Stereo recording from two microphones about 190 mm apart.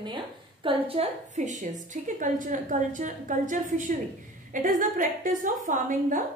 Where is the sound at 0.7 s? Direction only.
30° right (ahead or behind).